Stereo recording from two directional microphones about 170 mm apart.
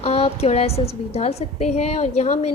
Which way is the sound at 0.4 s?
35° left (ahead or behind).